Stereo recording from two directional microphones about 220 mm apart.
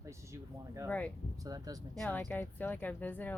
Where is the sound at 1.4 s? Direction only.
15° right (ahead or behind).